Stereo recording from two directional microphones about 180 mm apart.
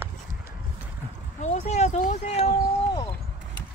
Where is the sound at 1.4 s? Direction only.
40° left (ahead or behind).